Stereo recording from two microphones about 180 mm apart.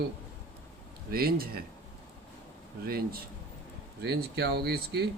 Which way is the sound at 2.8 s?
55° right (ahead or behind).